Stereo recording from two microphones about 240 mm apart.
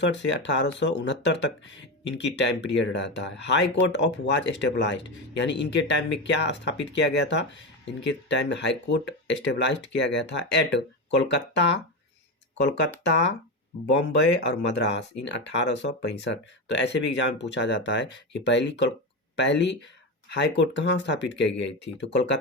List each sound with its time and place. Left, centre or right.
0.0 s speech: left